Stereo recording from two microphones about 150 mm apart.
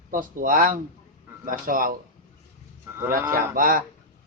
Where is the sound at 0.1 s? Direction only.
65° right (ahead or behind).